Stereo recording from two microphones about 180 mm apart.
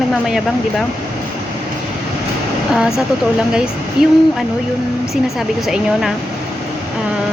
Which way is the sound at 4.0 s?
5° right (ahead or behind).